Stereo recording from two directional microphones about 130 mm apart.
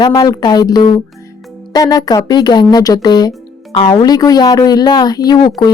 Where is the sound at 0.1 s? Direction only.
30° left (ahead or behind).